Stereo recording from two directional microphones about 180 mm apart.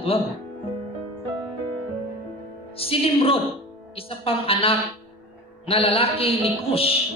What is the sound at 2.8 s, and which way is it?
Speech, 30° left (ahead or behind).